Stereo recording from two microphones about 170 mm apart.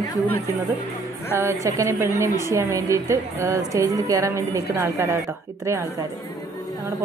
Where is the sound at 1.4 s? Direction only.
15° right (ahead or behind).